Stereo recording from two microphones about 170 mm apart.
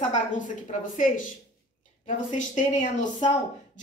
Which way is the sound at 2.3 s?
45° left (ahead or behind).